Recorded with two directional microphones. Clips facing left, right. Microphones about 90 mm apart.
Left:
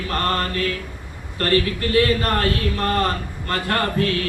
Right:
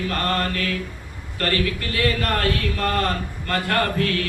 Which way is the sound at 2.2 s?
30° left (ahead or behind).